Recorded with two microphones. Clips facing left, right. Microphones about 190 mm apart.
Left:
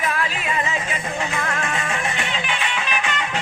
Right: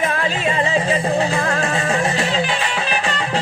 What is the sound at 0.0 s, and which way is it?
Music, 30° right (ahead or behind).